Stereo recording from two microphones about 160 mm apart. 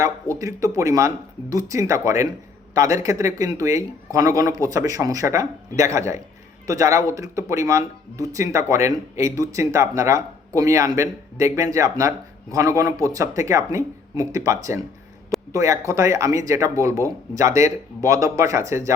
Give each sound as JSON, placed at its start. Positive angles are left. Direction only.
{"t": 0.3, "sound": "speech", "side_deg": -20}